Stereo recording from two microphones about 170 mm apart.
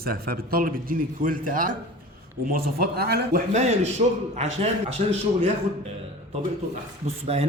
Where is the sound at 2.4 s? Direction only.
65° right (ahead or behind).